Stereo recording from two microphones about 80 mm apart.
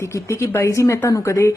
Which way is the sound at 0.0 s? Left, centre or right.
Left.